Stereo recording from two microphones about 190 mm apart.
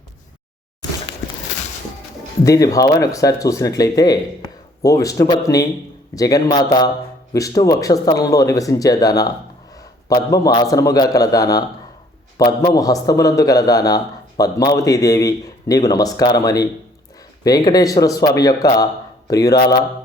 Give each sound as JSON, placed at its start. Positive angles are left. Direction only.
{"t": 2.4, "sound": "a man's voice", "side_deg": 20}